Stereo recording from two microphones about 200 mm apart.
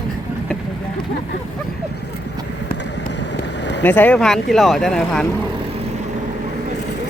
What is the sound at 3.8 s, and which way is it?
Speech, 10° left (ahead or behind).